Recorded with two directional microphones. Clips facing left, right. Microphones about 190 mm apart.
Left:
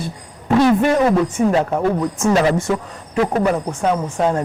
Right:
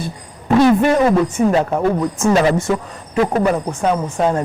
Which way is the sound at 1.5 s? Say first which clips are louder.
Right 1 dB; 25° right (ahead or behind).